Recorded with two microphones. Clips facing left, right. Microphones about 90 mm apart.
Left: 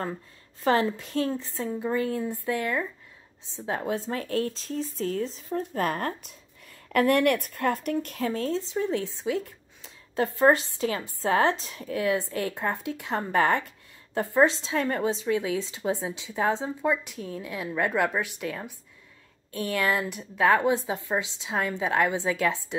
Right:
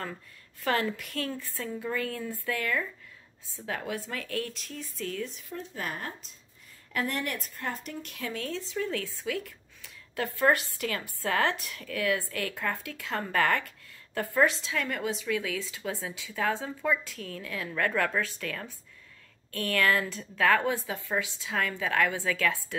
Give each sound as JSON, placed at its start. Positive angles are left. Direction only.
{"t": 0.7, "sound": "a woman's voice", "side_deg": 25}
{"t": 5.6, "sound": "speech", "side_deg": 45}
{"t": 6.9, "sound": "a woman's voice", "side_deg": 60}